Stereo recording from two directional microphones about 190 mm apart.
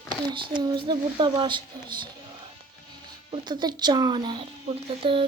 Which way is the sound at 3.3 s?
25° right (ahead or behind).